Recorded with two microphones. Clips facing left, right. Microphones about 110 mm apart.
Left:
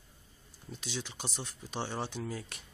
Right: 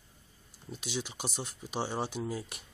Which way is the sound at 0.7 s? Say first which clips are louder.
Right 3 dB; 15° right (ahead or behind).